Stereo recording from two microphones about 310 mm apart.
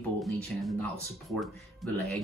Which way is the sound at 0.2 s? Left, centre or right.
Centre.